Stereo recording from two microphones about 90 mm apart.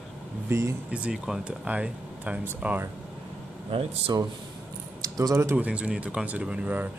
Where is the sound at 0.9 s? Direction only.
10° right (ahead or behind).